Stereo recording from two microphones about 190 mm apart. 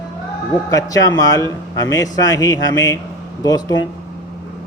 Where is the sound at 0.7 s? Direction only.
20° left (ahead or behind).